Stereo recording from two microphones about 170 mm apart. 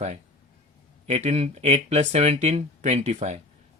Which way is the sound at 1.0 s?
40° right (ahead or behind).